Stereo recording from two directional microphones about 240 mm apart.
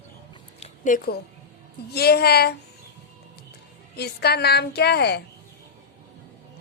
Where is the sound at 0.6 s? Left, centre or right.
Left.